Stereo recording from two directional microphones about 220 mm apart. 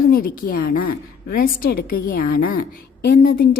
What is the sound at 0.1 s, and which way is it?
A woman's voice, 40° left (ahead or behind).